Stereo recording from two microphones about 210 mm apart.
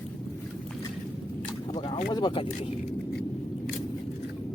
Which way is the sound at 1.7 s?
25° left (ahead or behind).